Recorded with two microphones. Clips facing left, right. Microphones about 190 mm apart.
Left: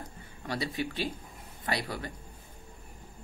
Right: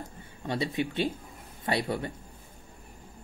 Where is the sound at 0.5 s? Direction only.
25° right (ahead or behind).